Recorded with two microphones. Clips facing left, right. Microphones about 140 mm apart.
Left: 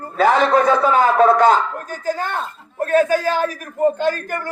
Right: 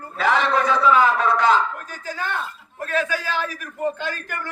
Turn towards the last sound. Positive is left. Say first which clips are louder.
# left 9 dB
turn(degrees=45)  # may be behind; listen again after turning